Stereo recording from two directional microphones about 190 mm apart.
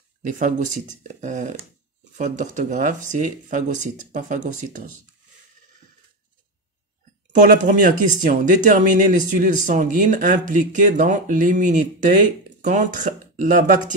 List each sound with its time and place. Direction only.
0.2 s speech: 45° right (ahead or behind)
7.3 s speech: 45° right (ahead or behind)